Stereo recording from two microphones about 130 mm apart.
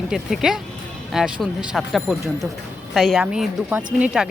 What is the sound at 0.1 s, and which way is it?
Speech, 5° right (ahead or behind).